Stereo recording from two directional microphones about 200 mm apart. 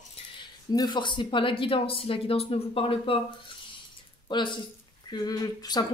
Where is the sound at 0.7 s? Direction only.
20° left (ahead or behind).